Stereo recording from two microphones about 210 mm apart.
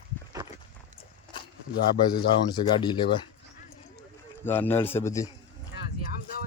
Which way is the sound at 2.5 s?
20° left (ahead or behind).